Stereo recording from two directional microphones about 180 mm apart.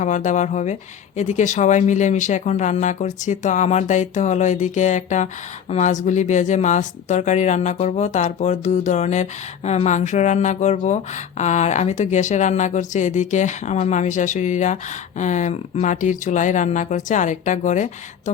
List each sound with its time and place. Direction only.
0.0 s speech: 45° left (ahead or behind)